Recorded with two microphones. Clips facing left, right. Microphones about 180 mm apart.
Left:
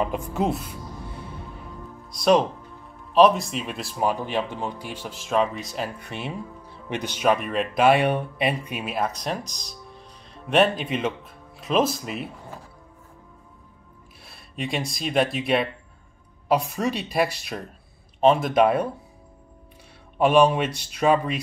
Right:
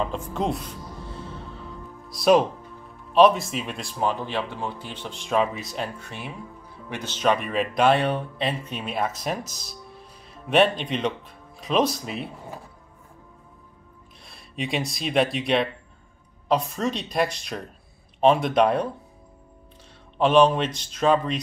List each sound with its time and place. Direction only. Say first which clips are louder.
0.0 s speech: left 2 dB; 10° left (ahead or behind)
2.0 s speech: right 1 dB; 5° right (ahead or behind)
5.9 s speech: left 4 dB; 20° left (ahead or behind); by 12.3 s centre (ahead or behind)
14.2 s speech: even; centre (ahead or behind)
20.2 s speech: even; 10° left (ahead or behind)